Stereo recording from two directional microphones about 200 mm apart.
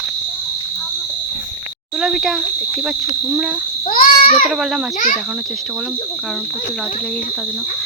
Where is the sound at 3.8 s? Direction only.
40° left (ahead or behind).